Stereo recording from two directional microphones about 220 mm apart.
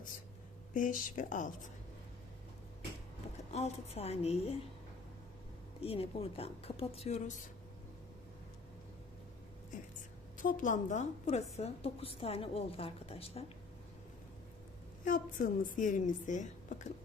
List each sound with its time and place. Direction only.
0.7 s a woman's voice: 35° left (ahead or behind)
3.3 s a woman's voice: 30° left (ahead or behind)
5.8 s a woman's voice: 25° left (ahead or behind)
10.3 s a woman's voice: 35° left (ahead or behind)
15.0 s a woman's voice: 35° left (ahead or behind)